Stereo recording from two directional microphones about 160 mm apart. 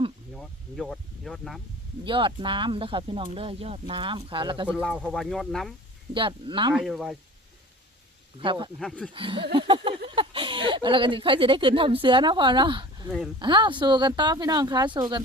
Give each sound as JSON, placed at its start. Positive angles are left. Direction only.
{"t": 0.3, "sound": "speech", "side_deg": 0}
{"t": 2.0, "sound": "speech", "side_deg": -30}
{"t": 4.7, "sound": "speech", "side_deg": -5}
{"t": 6.1, "sound": "speech", "side_deg": -30}
{"t": 6.7, "sound": "speech", "side_deg": 0}
{"t": 8.4, "sound": "speech", "side_deg": -30}
{"t": 8.8, "sound": "speech", "side_deg": 5}
{"t": 9.1, "sound": "a sound", "side_deg": -30}
{"t": 10.2, "sound": "speech", "side_deg": -35}
{"t": 13.1, "sound": "speech", "side_deg": 0}
{"t": 13.4, "sound": "speech", "side_deg": -30}